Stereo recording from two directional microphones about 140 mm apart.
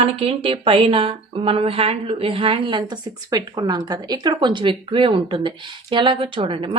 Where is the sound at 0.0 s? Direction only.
45° right (ahead or behind).